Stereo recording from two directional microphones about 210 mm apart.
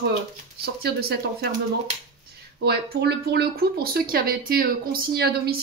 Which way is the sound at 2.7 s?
50° right (ahead or behind).